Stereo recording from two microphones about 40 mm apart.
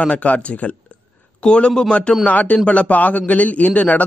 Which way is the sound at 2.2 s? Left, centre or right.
Left.